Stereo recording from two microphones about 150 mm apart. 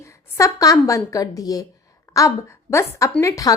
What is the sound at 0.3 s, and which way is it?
A woman's voice, 20° left (ahead or behind).